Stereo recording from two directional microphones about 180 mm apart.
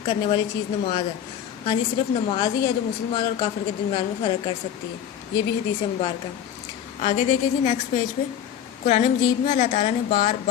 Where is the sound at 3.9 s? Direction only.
25° left (ahead or behind).